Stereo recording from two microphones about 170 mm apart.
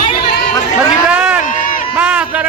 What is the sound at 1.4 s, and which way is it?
Run, 55° left (ahead or behind).